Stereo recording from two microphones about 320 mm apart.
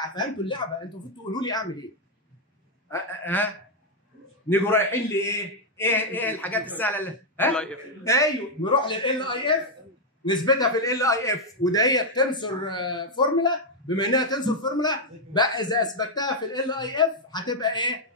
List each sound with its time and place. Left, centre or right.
0.1 s a man's voice: centre
2.9 s a man's voice: centre
4.5 s a man's voice: centre